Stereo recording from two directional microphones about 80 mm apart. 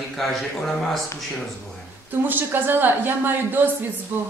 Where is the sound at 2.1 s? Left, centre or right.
Right.